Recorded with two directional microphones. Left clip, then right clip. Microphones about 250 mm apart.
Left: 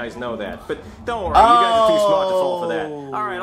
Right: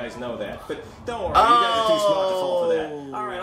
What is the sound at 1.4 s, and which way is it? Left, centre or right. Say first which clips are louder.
Speech: left 4 dB; right.